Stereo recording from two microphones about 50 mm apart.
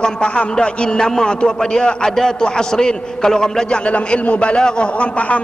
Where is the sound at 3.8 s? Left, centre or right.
Left.